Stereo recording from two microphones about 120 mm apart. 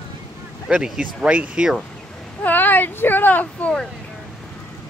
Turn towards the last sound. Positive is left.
turn(degrees=10)  # may be behind; listen again after turning